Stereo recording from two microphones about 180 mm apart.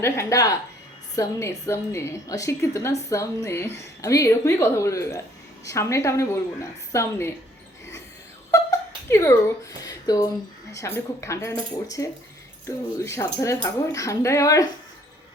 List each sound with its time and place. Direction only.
0.0 s a woman's voice: 15° left (ahead or behind)
9.0 s speech: 15° left (ahead or behind)
9.8 s a sound: 20° left (ahead or behind)
10.7 s a woman's voice: 15° left (ahead or behind)